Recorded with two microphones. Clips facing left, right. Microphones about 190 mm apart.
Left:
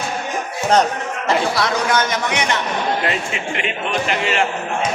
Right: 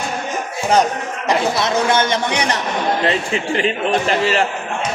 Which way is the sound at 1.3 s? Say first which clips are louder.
Right 1 dB; 20° right (ahead or behind).